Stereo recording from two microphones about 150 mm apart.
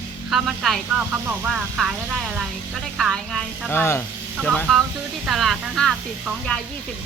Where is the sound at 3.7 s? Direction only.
15° left (ahead or behind).